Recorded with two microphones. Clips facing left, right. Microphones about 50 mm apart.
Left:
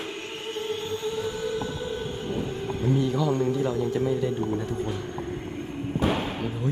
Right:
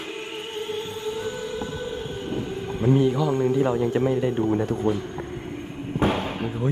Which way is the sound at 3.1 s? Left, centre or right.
Centre.